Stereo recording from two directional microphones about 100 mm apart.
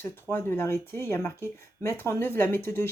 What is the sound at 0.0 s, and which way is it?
Speech, 25° left (ahead or behind).